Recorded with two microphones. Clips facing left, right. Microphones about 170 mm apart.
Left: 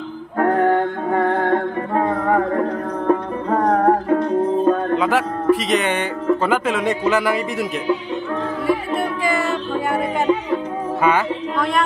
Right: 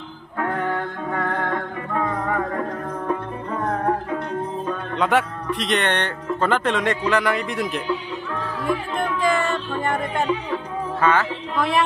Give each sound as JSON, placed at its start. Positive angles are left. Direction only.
{"t": 0.4, "sound": "music", "side_deg": 45}
{"t": 4.9, "sound": "speech", "side_deg": 5}
{"t": 8.6, "sound": "music", "side_deg": 5}
{"t": 11.0, "sound": "speech", "side_deg": 10}
{"t": 11.5, "sound": "speech", "side_deg": -5}